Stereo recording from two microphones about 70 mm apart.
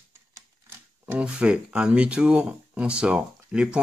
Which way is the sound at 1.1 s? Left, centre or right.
Centre.